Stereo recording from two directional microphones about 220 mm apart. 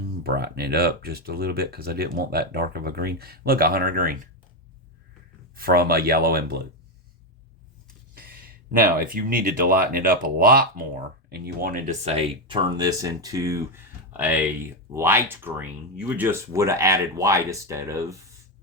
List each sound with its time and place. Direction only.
0.2 s speech: 45° right (ahead or behind)
5.5 s speech: 45° right (ahead or behind)
8.7 s speech: 40° right (ahead or behind); by 18.2 s 15° right (ahead or behind)